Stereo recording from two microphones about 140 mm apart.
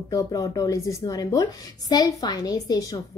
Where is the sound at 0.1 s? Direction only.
20° left (ahead or behind).